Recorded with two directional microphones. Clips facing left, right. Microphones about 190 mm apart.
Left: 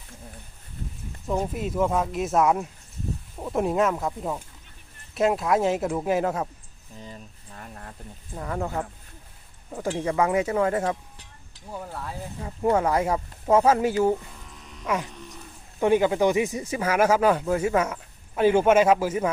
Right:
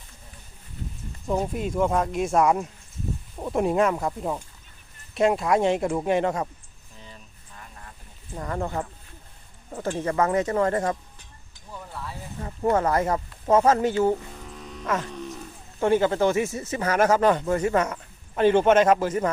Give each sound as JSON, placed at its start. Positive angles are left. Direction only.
{"t": 1.3, "sound": "speech", "side_deg": 0}
{"t": 7.0, "sound": "a sound", "side_deg": 40}
{"t": 8.4, "sound": "speech", "side_deg": 5}
{"t": 9.9, "sound": "speech", "side_deg": 10}
{"t": 11.7, "sound": "a sound", "side_deg": 40}
{"t": 12.4, "sound": "speech", "side_deg": 5}